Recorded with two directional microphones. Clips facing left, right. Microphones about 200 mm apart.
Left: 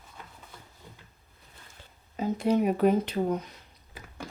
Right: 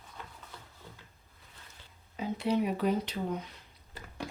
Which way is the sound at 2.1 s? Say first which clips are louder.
Left 5 dB; 45° left (ahead or behind).